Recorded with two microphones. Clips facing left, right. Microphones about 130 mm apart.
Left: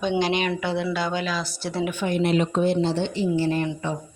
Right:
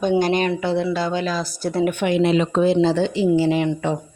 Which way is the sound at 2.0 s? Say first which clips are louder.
Right 3 dB; 90° right.